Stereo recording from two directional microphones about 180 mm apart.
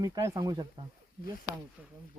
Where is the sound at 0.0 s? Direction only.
20° right (ahead or behind).